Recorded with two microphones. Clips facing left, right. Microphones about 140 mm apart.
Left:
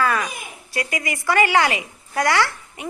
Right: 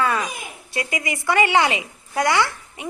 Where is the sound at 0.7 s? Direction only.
25° right (ahead or behind).